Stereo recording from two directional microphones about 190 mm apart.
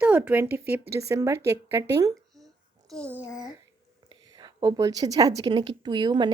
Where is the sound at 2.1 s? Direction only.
Centre (ahead or behind).